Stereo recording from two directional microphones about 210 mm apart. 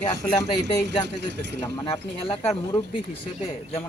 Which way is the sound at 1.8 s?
25° left (ahead or behind).